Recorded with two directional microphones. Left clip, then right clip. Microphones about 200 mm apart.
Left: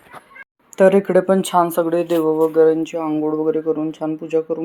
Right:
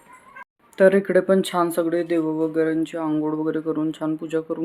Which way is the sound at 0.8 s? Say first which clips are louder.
Left 3 dB; 10° left (ahead or behind).